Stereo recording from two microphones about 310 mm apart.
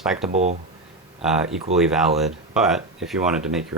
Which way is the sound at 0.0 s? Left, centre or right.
Centre.